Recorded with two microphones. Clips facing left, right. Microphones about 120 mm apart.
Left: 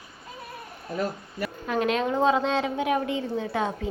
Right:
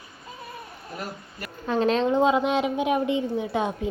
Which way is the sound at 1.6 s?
30° right (ahead or behind).